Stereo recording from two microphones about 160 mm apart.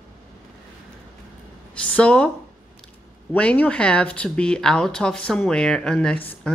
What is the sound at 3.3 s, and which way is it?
Speech, 10° left (ahead or behind).